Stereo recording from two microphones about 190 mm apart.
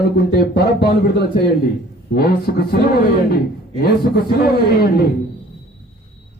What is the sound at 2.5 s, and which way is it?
Speech, 50° left (ahead or behind).